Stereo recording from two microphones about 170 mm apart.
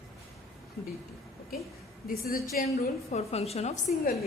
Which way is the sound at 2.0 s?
60° left (ahead or behind).